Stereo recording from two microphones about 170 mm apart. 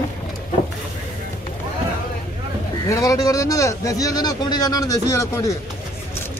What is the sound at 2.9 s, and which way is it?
Speech, 20° left (ahead or behind).